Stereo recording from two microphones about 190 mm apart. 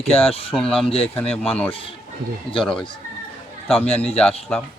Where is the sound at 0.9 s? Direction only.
30° left (ahead or behind).